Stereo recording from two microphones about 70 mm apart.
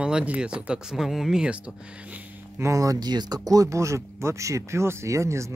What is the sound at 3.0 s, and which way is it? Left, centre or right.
Speech, right.